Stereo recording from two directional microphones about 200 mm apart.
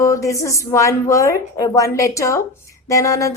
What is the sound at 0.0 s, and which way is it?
A woman's voice, 15° left (ahead or behind).